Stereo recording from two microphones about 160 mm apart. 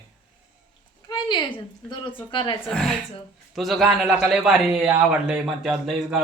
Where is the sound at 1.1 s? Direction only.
30° left (ahead or behind).